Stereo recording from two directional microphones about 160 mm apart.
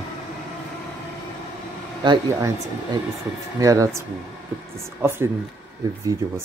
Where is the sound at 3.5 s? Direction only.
20° right (ahead or behind).